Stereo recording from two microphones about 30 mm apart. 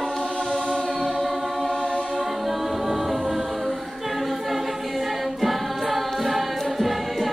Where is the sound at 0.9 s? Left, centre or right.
Centre.